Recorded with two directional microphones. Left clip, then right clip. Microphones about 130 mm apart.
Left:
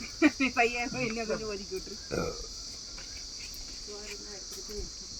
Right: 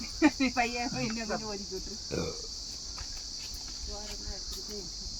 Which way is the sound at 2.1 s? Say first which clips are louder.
Left 2 dB; 10° right (ahead or behind).